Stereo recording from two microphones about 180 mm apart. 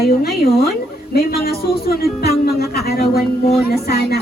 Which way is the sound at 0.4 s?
60° left (ahead or behind).